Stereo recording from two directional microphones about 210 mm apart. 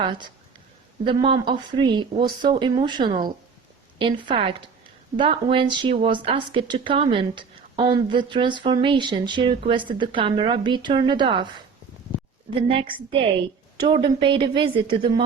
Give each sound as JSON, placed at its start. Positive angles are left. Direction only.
{"t": 0.0, "sound": "a woman's voice", "side_deg": -25}
{"t": 12.5, "sound": "a woman's voice", "side_deg": -25}